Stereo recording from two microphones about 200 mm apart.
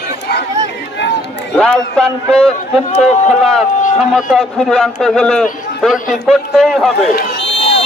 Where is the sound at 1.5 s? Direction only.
5° left (ahead or behind).